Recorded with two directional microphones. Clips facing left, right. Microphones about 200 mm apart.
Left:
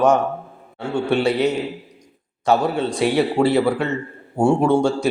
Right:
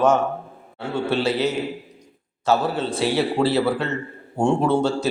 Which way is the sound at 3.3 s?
15° left (ahead or behind).